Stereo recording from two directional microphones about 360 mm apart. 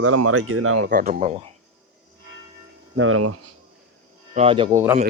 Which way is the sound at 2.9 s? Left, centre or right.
Right.